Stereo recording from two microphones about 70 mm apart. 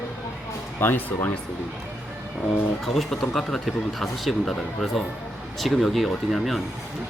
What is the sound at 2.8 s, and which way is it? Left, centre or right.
Speech, centre.